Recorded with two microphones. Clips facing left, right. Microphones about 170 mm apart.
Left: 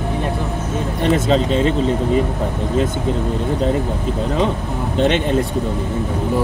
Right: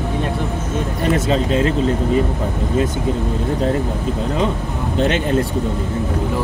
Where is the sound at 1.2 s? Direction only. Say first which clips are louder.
Left 1 dB; 30° left (ahead or behind).